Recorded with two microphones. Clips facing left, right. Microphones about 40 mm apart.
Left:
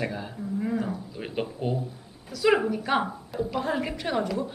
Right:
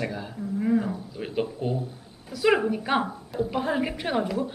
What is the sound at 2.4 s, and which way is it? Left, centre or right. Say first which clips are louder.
Speech: even; centre.